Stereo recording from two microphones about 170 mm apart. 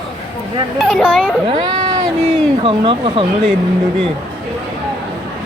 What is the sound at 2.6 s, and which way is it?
Speech, 30° right (ahead or behind).